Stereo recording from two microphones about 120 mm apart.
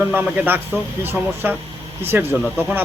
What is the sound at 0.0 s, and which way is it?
A man's voice, 15° right (ahead or behind).